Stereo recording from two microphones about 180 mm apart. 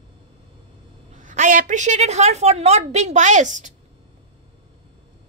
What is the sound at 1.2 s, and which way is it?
A woman's voice, 45° right (ahead or behind).